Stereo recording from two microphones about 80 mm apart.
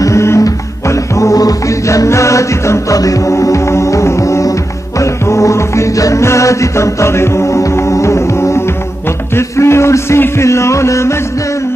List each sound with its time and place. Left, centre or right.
0.0 s music: left